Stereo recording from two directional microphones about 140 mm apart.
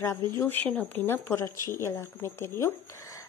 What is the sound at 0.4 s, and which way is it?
Speech, 15° left (ahead or behind).